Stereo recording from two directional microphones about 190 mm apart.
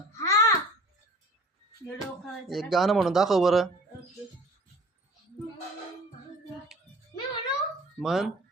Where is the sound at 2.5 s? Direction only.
Centre (ahead or behind).